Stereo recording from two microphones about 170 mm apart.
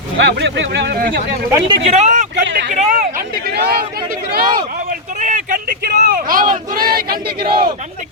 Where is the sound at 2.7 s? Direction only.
50° right (ahead or behind).